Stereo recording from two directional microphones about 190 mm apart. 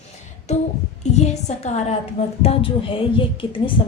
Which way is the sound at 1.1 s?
35° left (ahead or behind).